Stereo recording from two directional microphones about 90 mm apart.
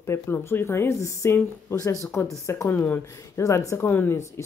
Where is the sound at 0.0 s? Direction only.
30° left (ahead or behind).